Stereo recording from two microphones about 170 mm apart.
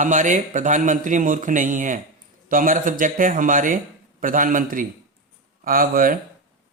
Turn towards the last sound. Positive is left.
turn(degrees=-55)  # may be behind; listen again after turning